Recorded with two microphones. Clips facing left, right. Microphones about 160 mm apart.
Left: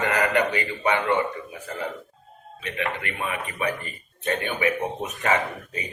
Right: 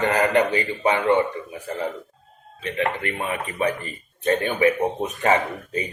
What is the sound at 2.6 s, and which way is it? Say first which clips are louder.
A man's voice: right 5 dB; 35° right (ahead or behind).